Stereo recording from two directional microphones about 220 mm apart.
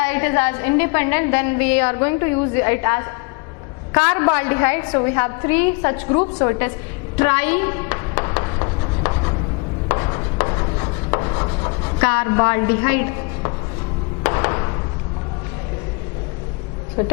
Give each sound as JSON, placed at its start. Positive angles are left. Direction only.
{"t": 0.0, "sound": "a woman's voice", "side_deg": 10}
{"t": 7.2, "sound": "music", "side_deg": 10}
{"t": 9.9, "sound": "rub", "side_deg": 20}
{"t": 12.0, "sound": "a woman's voice", "side_deg": 15}
{"t": 14.3, "sound": "a sound", "side_deg": 20}